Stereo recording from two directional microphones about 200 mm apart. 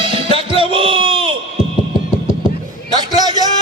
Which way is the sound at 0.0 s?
25° right (ahead or behind).